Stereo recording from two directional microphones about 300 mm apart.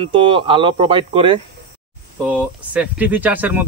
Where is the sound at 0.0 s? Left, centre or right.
Centre.